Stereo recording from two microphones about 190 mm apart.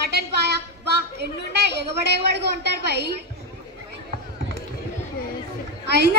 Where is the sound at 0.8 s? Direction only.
60° right (ahead or behind).